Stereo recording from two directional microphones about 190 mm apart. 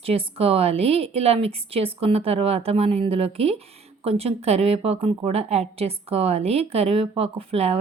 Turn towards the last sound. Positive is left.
turn(degrees=-30)  # may be behind; listen again after turning